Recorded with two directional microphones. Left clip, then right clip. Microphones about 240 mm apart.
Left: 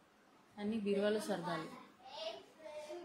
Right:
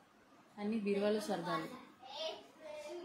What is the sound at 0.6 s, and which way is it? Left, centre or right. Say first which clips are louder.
Speech: even; centre.